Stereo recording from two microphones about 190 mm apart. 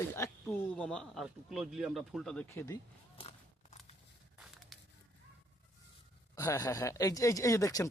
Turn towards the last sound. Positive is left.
turn(degrees=20)  # may be behind; listen again after turning